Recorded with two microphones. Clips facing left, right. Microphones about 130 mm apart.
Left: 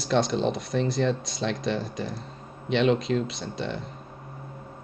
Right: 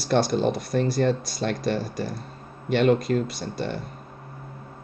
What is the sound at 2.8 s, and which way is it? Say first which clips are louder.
Speech: right 2 dB; 55° right (ahead or behind).